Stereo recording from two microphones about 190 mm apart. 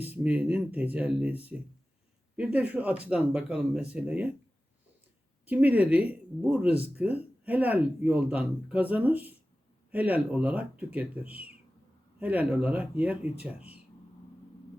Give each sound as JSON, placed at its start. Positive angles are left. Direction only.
{"t": 0.0, "sound": "speech", "side_deg": -10}
{"t": 5.5, "sound": "speech", "side_deg": -10}